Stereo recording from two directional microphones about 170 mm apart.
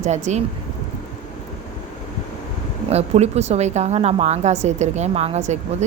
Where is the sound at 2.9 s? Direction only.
40° right (ahead or behind).